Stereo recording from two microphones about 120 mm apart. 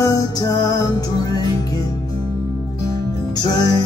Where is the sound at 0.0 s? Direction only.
30° left (ahead or behind).